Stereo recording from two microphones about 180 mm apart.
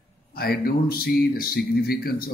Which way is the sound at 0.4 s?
60° left (ahead or behind).